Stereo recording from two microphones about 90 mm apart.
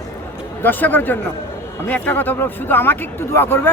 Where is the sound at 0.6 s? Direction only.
20° left (ahead or behind).